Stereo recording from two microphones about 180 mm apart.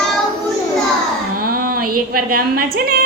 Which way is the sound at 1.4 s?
55° right (ahead or behind).